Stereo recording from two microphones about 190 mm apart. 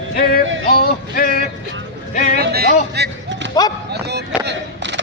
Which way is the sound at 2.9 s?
65° right (ahead or behind).